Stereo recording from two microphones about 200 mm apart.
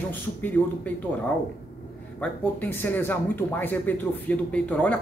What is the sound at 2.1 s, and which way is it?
Speech, 10° left (ahead or behind).